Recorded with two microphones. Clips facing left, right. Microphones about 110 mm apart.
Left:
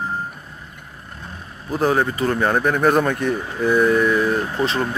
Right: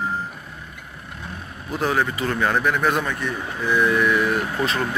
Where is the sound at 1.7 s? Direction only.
35° left (ahead or behind).